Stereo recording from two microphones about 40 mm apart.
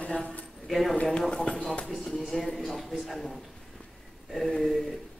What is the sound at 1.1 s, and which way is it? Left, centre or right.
Speech, left.